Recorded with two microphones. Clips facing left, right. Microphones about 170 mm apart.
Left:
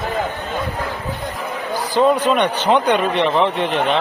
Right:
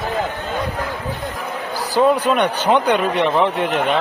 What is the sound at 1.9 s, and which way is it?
A man's voice, 10° right (ahead or behind).